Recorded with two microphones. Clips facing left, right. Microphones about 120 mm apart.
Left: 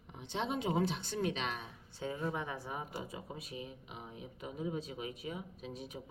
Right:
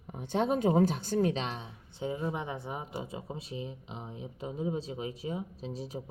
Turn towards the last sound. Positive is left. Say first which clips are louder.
# right 6 dB
turn(degrees=-30)  # may be behind; listen again after turning